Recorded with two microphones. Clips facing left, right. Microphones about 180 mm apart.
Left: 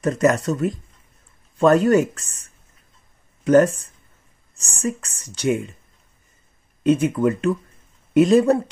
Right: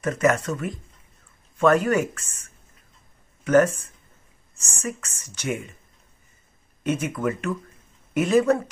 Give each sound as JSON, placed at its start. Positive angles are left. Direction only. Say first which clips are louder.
{"t": 0.0, "sound": "a woman's voice", "louder": "left 3 dB", "side_deg": 35}
{"t": 3.4, "sound": "a woman's voice", "louder": "left 3 dB", "side_deg": 35}
{"t": 6.8, "sound": "a woman's voice", "louder": "left 8 dB", "side_deg": 30}